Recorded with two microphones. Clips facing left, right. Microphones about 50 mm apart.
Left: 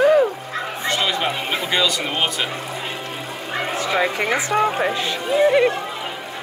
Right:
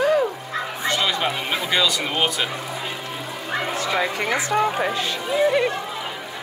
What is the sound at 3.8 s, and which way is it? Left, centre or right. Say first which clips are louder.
Speech: left 5 dB; left.